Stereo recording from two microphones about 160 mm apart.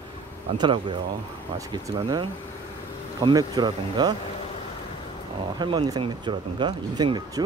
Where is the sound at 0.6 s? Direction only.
30° right (ahead or behind).